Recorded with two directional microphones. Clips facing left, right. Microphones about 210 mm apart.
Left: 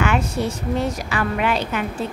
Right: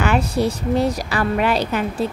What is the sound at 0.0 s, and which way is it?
A woman's voice, 35° right (ahead or behind).